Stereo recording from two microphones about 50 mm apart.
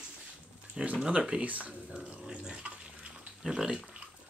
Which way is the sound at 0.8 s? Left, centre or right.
Centre.